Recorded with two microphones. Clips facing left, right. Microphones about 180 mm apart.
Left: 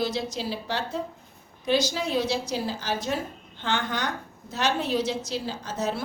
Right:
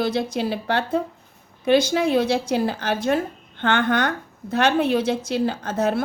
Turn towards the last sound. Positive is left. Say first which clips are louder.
# right 7 dB
turn(degrees=-55)  # may be behind; listen again after turning